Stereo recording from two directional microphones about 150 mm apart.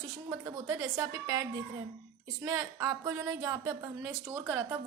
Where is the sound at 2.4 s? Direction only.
25° right (ahead or behind).